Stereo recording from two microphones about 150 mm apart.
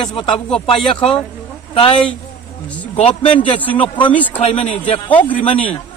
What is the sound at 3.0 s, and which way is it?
Speech, 40° left (ahead or behind).